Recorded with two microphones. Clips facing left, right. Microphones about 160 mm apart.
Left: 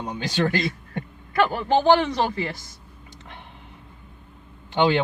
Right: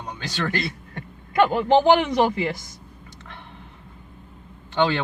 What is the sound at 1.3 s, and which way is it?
Speech, 20° right (ahead or behind).